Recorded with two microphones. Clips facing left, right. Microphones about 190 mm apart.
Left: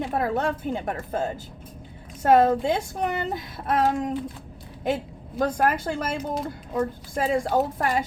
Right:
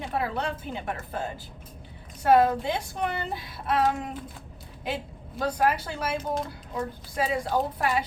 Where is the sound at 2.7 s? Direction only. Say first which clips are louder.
Left 4 dB; 45° left (ahead or behind).